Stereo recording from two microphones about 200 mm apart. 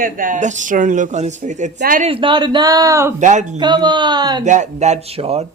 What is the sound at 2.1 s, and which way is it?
Speech, 25° right (ahead or behind).